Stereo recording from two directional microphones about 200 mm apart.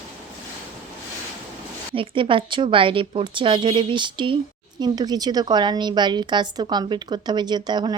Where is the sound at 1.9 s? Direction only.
25° right (ahead or behind).